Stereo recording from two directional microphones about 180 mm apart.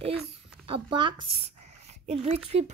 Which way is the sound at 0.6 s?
25° right (ahead or behind).